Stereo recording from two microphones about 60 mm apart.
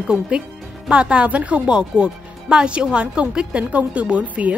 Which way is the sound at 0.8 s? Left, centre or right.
Centre.